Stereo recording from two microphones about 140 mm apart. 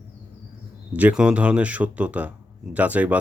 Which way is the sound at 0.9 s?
10° right (ahead or behind).